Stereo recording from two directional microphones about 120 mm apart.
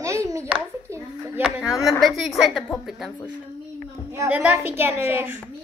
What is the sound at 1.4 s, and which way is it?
A woman's voice, 5° right (ahead or behind).